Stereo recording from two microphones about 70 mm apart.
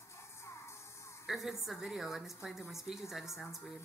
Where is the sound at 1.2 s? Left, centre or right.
Centre.